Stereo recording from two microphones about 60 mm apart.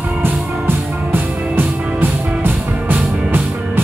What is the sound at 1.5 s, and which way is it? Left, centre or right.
Music, right.